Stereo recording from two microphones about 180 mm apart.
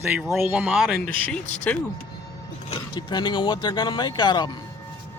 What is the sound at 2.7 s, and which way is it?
Speech, 25° left (ahead or behind).